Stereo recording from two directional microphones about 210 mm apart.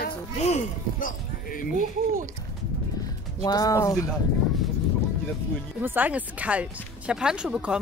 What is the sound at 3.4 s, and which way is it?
Speech, 15° left (ahead or behind).